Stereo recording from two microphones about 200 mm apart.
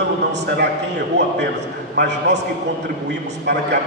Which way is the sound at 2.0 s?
60° right (ahead or behind).